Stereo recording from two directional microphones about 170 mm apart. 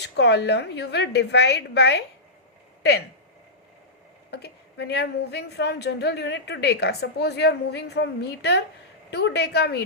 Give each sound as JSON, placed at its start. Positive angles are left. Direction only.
{"t": 0.0, "sound": "a woman's voice", "side_deg": 85}
{"t": 4.3, "sound": "a woman's voice", "side_deg": 70}
{"t": 9.0, "sound": "a woman's voice", "side_deg": 85}